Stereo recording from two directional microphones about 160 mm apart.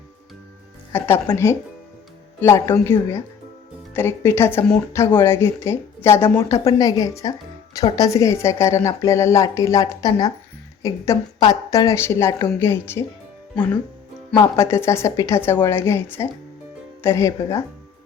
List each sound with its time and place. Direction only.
0.9 s a woman's voice: 15° left (ahead or behind)
14.6 s a woman's voice: 15° left (ahead or behind)